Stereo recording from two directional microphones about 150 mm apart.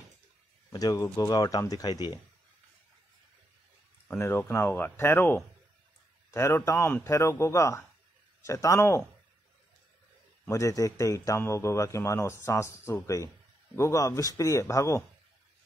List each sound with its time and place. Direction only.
0.7 s a man's voice: 25° left (ahead or behind)
4.2 s a man's voice: 15° left (ahead or behind)
10.5 s a man's voice: 20° left (ahead or behind)